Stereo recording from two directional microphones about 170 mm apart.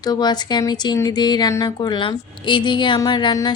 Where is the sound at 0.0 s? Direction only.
25° left (ahead or behind).